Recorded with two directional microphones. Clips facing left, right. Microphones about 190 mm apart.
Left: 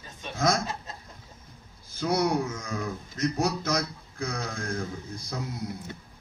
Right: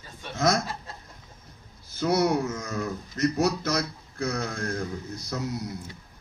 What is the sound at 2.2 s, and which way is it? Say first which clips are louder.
Speech: right 2 dB; 55° right (ahead or behind).